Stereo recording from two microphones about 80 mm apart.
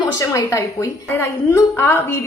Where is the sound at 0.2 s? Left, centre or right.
Left.